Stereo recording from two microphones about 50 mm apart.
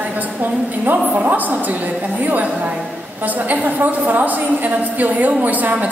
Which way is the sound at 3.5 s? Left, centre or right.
Right.